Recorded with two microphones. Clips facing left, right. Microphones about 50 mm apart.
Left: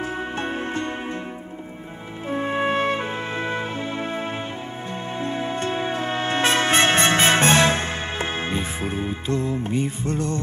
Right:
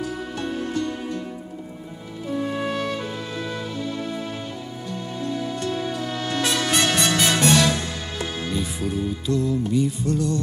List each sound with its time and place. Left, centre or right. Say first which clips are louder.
0.0 s music: left 2 dB; left
2.2 s music: left 3 dB; left